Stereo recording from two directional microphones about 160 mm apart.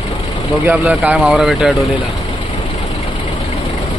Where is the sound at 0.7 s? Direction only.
10° right (ahead or behind).